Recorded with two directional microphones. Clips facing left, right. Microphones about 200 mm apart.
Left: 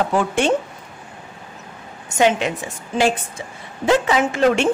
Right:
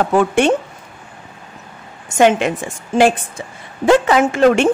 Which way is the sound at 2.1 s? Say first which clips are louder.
Right 4 dB; 50° right (ahead or behind).